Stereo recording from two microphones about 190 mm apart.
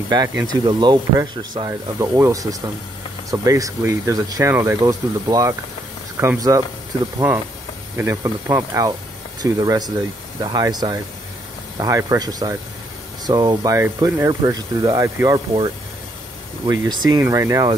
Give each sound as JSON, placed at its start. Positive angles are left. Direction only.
{"t": 0.1, "sound": "speech", "side_deg": -20}
{"t": 8.0, "sound": "speech", "side_deg": -15}
{"t": 16.6, "sound": "speech", "side_deg": -20}